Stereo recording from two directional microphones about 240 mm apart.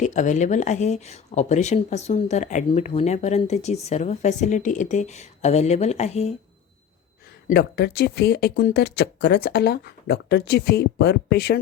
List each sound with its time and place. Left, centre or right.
0.0 s speech: left
7.4 s speech: left